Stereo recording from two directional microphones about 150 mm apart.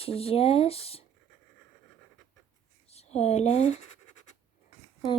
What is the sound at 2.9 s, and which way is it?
Speech, 45° left (ahead or behind).